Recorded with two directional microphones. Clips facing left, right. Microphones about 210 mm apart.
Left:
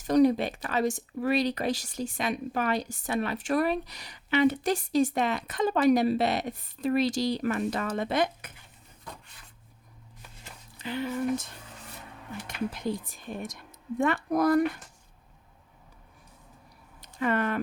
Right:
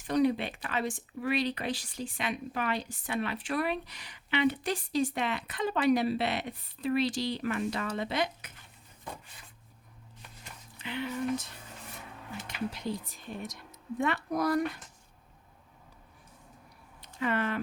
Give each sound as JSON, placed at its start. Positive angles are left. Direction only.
{"t": 0.1, "sound": "speech", "side_deg": 40}
{"t": 10.8, "sound": "speech", "side_deg": 40}
{"t": 12.5, "sound": "speech", "side_deg": 50}
{"t": 17.0, "sound": "a sound", "side_deg": 50}